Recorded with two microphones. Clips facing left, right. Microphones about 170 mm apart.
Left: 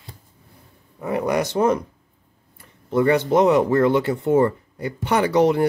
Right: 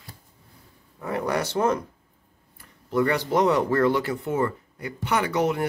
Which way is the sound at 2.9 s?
25° left (ahead or behind).